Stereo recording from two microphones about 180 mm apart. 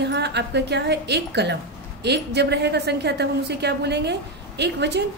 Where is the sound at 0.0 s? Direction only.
70° right (ahead or behind).